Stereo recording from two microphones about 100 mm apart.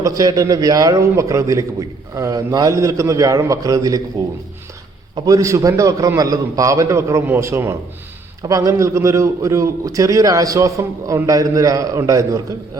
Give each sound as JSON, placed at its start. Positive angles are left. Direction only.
{"t": 0.0, "sound": "a man's voice", "side_deg": -35}
{"t": 5.2, "sound": "a man's voice", "side_deg": -35}